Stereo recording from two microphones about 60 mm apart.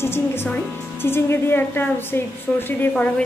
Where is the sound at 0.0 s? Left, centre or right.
Left.